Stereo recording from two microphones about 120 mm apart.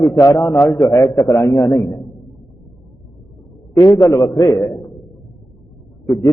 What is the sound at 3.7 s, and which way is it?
Speech, 30° left (ahead or behind).